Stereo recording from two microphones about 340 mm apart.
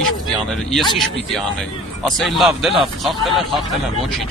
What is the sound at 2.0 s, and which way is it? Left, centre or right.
Speech, centre.